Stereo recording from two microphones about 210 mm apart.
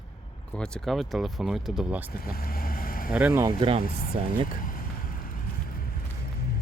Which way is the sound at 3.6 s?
25° right (ahead or behind).